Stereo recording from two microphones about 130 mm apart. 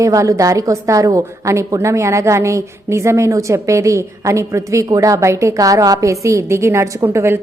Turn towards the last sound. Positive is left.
turn(degrees=-20)  # may be behind; listen again after turning